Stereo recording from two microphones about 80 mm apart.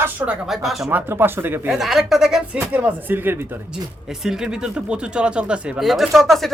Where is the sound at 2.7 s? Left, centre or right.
Centre.